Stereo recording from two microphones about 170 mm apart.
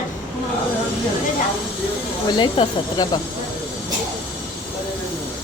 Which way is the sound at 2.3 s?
30° left (ahead or behind).